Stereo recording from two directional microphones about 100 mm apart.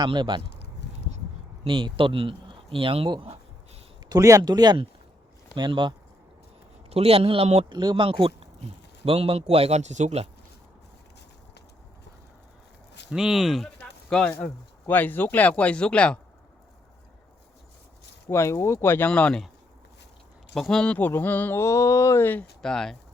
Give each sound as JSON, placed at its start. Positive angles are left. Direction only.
{"t": 0.0, "sound": "speech", "side_deg": -50}
{"t": 1.6, "sound": "speech", "side_deg": -55}
{"t": 4.1, "sound": "speech", "side_deg": -35}
{"t": 6.9, "sound": "speech", "side_deg": -90}
{"t": 7.7, "sound": "speech", "side_deg": -50}
{"t": 13.1, "sound": "speech", "side_deg": -5}
{"t": 13.7, "sound": "a sound", "side_deg": 10}
{"t": 14.8, "sound": "speech", "side_deg": 20}
{"t": 18.3, "sound": "speech", "side_deg": 25}
{"t": 20.5, "sound": "speech", "side_deg": 5}
{"t": 22.6, "sound": "speech", "side_deg": 5}